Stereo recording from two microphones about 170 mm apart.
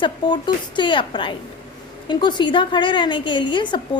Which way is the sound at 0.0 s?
25° left (ahead or behind).